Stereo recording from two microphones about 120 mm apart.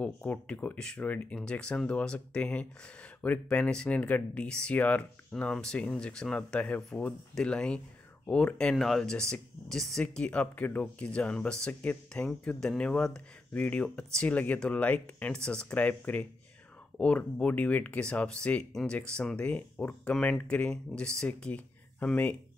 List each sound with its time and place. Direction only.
0.0 s speech: 10° left (ahead or behind)